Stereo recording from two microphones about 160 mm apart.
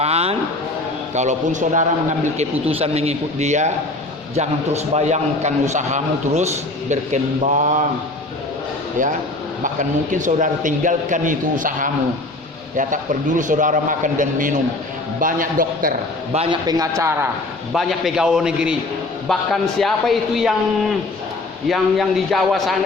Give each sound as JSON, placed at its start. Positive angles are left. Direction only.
{"t": 0.0, "sound": "a sound", "side_deg": -40}
{"t": 1.1, "sound": "a man's voice", "side_deg": -45}
{"t": 9.7, "sound": "a man's voice", "side_deg": -50}
{"t": 16.3, "sound": "a man's voice", "side_deg": -40}
{"t": 16.6, "sound": "a man's voice", "side_deg": -20}
{"t": 17.7, "sound": "a man's voice", "side_deg": 0}
{"t": 21.7, "sound": "a man's voice", "side_deg": 0}